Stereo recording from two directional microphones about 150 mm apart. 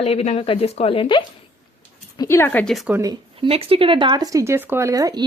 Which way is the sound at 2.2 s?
15° left (ahead or behind).